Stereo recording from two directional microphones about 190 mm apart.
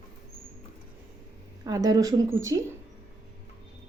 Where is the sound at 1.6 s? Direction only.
20° right (ahead or behind).